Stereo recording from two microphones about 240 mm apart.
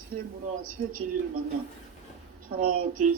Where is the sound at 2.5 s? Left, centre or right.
Right.